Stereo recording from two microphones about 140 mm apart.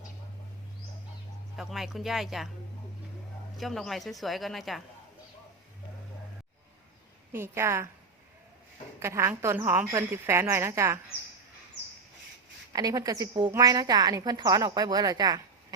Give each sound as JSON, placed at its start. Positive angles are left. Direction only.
{"t": 1.5, "sound": "speech", "side_deg": 0}
{"t": 3.6, "sound": "speech", "side_deg": 0}
{"t": 7.3, "sound": "a woman's voice", "side_deg": -20}
{"t": 9.0, "sound": "a woman's voice", "side_deg": -20}
{"t": 12.7, "sound": "a woman's voice", "side_deg": -25}